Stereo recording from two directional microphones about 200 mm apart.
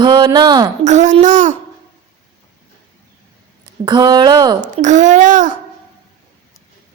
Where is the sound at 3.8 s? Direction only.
20° right (ahead or behind).